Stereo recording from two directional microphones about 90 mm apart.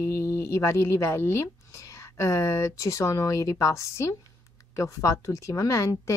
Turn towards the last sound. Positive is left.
turn(degrees=35)  # may be behind; listen again after turning